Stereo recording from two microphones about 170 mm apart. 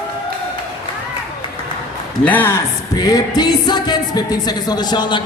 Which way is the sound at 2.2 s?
10° left (ahead or behind).